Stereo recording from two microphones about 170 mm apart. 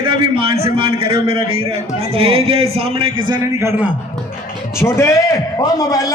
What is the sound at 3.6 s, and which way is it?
Speech, 10° right (ahead or behind).